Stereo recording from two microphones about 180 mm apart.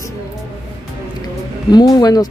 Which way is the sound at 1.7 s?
20° left (ahead or behind).